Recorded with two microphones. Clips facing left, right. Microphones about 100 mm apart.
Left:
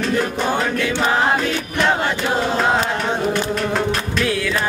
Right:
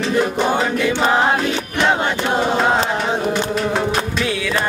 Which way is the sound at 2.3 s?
5° right (ahead or behind).